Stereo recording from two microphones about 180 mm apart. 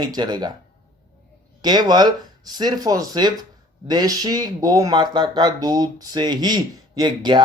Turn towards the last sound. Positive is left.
turn(degrees=-25)  # may be behind; listen again after turning